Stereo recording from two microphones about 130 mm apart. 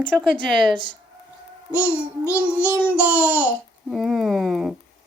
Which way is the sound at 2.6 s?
15° left (ahead or behind).